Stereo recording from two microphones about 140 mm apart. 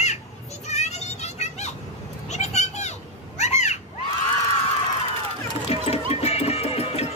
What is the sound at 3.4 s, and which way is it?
Cat, 55° left (ahead or behind).